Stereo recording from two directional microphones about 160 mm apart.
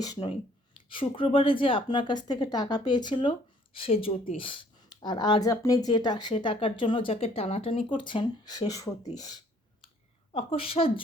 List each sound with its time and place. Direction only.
0.0 s speech: 25° left (ahead or behind)
10.3 s a woman's voice: 35° left (ahead or behind)